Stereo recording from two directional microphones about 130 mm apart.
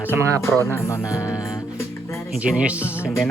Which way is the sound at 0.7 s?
20° left (ahead or behind).